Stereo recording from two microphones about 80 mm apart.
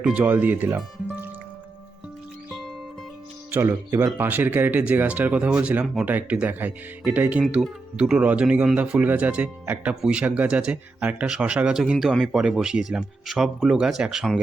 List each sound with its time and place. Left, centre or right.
0.0 s speech: centre
3.7 s speech: right
4.2 s speech: right
5.8 s speech: centre
6.1 s speech: centre